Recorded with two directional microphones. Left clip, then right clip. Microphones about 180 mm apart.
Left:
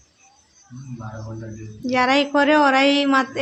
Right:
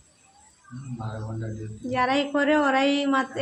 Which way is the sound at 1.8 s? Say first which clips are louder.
Left 6 dB; 20° left (ahead or behind).